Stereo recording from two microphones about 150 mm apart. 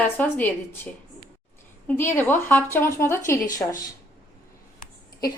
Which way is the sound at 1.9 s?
15° left (ahead or behind).